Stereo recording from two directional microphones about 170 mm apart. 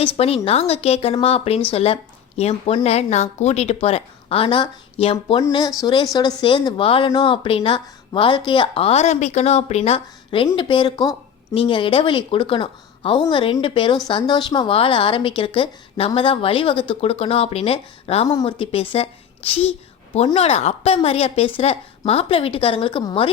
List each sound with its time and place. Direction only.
0.0 s speech: 35° left (ahead or behind)
5.4 s a woman's voice: 25° left (ahead or behind)
18.3 s speech: 25° left (ahead or behind)